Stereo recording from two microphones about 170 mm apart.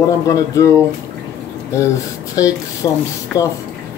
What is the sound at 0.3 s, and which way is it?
Speech, 20° left (ahead or behind).